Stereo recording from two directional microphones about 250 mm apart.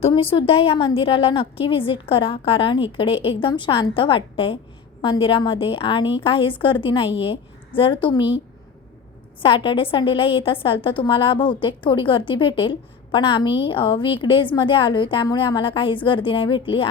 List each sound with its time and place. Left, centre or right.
0.0 s a woman's voice: left
9.4 s a woman's voice: left